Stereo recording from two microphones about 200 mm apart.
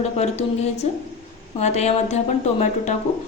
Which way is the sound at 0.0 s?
35° left (ahead or behind).